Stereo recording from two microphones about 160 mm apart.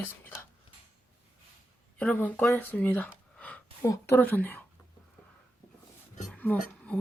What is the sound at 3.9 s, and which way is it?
Speech, 15° left (ahead or behind).